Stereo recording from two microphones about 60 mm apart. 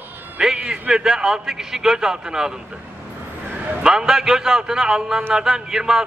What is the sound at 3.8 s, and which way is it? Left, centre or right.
A man's voice, centre.